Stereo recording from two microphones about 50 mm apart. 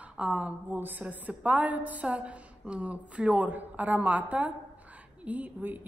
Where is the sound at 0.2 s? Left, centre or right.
Right.